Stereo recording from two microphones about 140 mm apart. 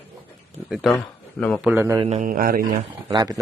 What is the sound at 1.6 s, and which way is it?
Speech, 15° right (ahead or behind).